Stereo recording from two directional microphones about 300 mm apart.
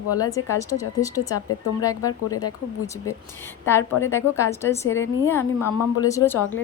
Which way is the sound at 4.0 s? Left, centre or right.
Centre.